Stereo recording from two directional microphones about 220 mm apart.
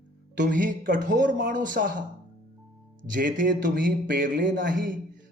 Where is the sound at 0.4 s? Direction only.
35° right (ahead or behind).